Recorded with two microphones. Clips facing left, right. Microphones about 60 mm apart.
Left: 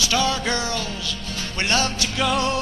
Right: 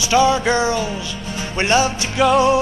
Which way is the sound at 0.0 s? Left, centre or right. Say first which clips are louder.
Right 7 dB; centre.